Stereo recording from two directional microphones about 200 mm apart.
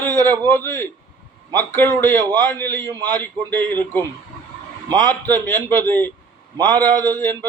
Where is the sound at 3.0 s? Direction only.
10° left (ahead or behind).